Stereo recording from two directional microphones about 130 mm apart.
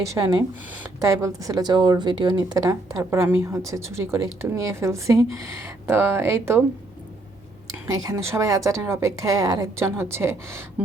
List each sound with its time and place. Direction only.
0.0 s a woman's voice: 25° right (ahead or behind)
8.1 s speech: 25° right (ahead or behind)